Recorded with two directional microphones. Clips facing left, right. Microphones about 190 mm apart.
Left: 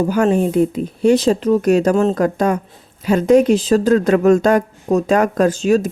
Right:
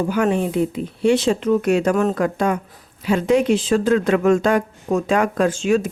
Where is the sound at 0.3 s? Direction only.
45° left (ahead or behind).